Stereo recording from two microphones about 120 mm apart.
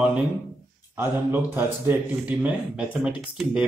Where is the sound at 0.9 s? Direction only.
20° right (ahead or behind).